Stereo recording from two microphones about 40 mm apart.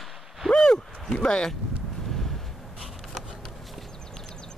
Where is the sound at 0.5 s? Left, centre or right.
Centre.